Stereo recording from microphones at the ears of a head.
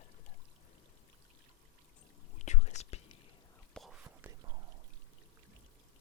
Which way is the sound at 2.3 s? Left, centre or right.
Left.